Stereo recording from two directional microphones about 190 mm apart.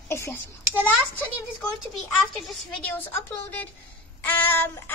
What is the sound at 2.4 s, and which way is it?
Child singing, 10° left (ahead or behind).